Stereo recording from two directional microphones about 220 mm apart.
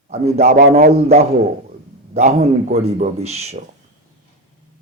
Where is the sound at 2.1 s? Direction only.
35° right (ahead or behind).